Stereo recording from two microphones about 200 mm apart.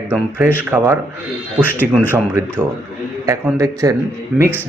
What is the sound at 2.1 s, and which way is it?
Speech, 10° right (ahead or behind).